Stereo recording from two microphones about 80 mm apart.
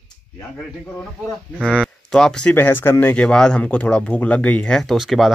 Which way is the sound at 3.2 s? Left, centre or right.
Centre.